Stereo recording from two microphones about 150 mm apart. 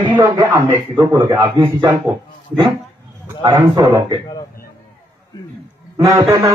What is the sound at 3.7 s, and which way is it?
Speech, 25° right (ahead or behind).